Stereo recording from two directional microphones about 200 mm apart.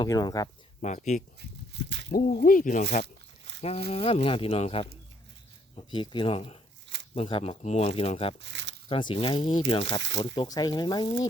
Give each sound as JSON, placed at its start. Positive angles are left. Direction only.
{"t": 0.0, "sound": "speech", "side_deg": 20}
{"t": 0.8, "sound": "speech", "side_deg": 35}
{"t": 1.4, "sound": "a sound", "side_deg": -60}
{"t": 2.0, "sound": "speech", "side_deg": 45}
{"t": 3.6, "sound": "speech", "side_deg": 30}
{"t": 8.4, "sound": "speech", "side_deg": -60}
{"t": 8.9, "sound": "speech", "side_deg": 25}